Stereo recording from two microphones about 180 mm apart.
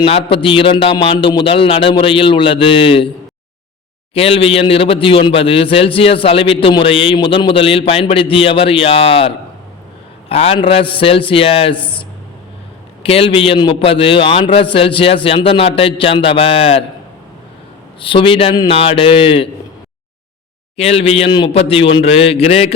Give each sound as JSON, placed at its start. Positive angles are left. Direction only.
{"t": 0.0, "sound": "a man's voice", "side_deg": 30}
{"t": 4.1, "sound": "a man's voice", "side_deg": 35}
{"t": 18.0, "sound": "a man's voice", "side_deg": 30}
{"t": 20.7, "sound": "a man's voice", "side_deg": 35}